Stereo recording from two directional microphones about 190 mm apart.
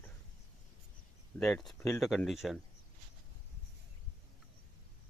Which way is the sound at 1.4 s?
Centre (ahead or behind).